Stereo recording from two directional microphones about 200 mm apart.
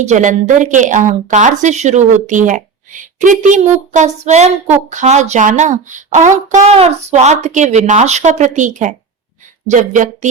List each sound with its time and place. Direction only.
0.1 s a woman's voice: 40° right (ahead or behind)